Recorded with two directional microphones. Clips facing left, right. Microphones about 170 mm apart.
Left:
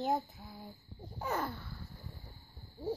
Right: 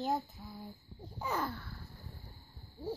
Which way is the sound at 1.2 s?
5° left (ahead or behind).